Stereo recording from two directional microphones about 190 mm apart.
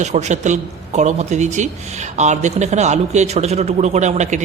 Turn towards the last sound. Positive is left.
turn(degrees=-40)  # may be behind; listen again after turning